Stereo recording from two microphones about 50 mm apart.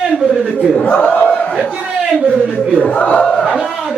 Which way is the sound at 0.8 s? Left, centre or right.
Left.